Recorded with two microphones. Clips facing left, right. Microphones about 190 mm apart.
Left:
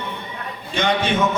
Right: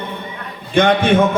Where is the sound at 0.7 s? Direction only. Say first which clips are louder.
Right 8 dB; 55° right (ahead or behind).